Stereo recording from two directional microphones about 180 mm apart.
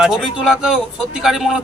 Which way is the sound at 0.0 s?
5° right (ahead or behind).